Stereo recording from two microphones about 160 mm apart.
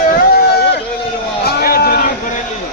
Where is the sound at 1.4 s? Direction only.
70° left (ahead or behind).